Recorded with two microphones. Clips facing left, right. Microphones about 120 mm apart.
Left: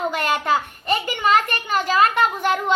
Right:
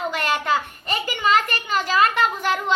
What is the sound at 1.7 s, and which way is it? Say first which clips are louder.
Speech: left 2 dB; 15° left (ahead or behind).